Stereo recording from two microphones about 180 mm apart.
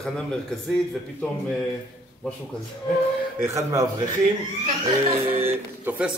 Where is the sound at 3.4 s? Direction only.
15° right (ahead or behind).